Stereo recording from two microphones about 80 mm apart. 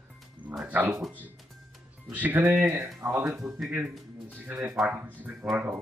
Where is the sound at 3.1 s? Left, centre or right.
Centre.